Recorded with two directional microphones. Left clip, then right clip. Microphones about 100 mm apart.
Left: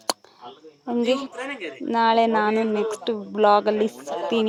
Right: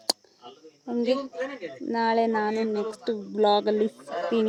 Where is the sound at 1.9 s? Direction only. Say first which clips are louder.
Left 5 dB; 15° left (ahead or behind).